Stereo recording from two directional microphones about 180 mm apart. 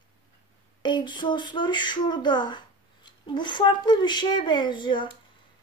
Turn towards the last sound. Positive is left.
turn(degrees=25)  # may be behind; listen again after turning